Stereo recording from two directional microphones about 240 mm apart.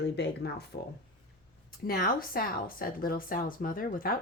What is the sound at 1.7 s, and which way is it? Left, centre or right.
Speech, left.